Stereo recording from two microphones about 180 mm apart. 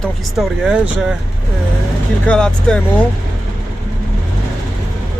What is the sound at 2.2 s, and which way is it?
Speech, 5° left (ahead or behind).